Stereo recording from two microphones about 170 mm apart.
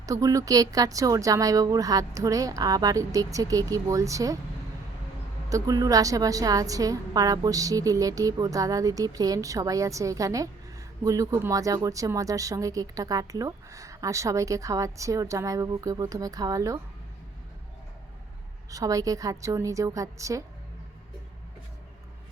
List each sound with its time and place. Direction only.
0.0 s a woman's voice: 20° right (ahead or behind)
5.5 s a woman's voice: 20° right (ahead or behind)
18.7 s a woman's voice: 20° right (ahead or behind)